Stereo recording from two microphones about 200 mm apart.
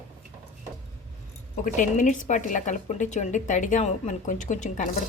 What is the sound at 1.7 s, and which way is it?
Speech, 40° left (ahead or behind).